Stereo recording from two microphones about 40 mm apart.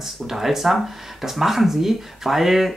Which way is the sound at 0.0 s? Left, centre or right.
Centre.